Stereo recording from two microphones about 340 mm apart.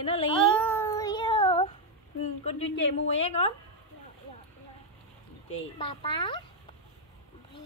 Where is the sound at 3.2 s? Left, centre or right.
Centre.